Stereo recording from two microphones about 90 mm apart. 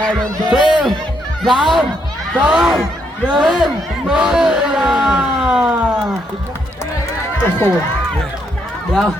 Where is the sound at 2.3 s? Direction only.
10° right (ahead or behind).